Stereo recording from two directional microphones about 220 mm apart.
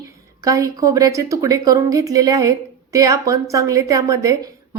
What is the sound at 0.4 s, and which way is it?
A woman's voice, 15° right (ahead or behind).